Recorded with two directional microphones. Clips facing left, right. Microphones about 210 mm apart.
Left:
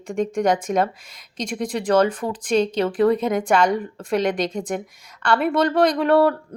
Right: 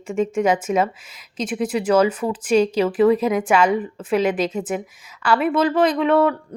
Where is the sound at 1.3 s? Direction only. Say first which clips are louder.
Right 3 dB; 5° right (ahead or behind).